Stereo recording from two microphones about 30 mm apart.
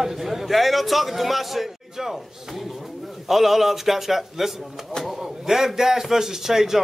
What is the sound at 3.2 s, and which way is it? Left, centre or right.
A man's voice, centre.